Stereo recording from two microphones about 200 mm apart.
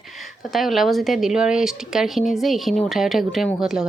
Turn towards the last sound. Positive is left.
turn(degrees=0)  # may be behind; listen again after turning